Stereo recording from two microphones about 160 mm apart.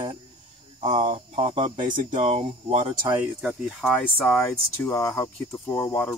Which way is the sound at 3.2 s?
5° right (ahead or behind).